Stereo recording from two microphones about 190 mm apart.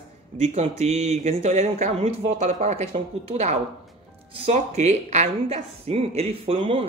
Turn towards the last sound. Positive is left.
turn(degrees=-30)  # may be behind; listen again after turning